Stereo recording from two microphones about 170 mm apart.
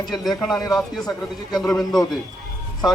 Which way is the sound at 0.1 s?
Centre (ahead or behind).